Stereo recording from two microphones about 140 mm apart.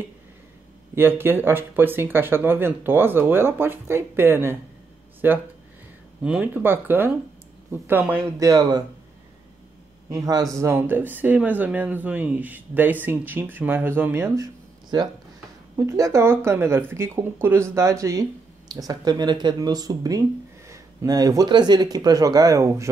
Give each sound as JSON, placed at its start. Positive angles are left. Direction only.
{"t": 0.9, "sound": "speech", "side_deg": -15}
{"t": 8.5, "sound": "speech", "side_deg": -30}
{"t": 10.1, "sound": "speech", "side_deg": -25}